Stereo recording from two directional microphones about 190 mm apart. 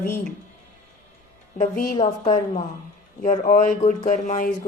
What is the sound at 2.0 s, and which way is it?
A woman's voice, 40° left (ahead or behind).